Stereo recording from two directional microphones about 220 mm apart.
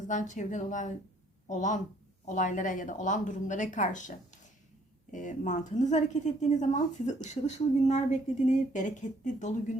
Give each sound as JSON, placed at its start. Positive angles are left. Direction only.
{"t": 0.1, "sound": "a woman's voice", "side_deg": 35}
{"t": 5.1, "sound": "a woman's voice", "side_deg": 35}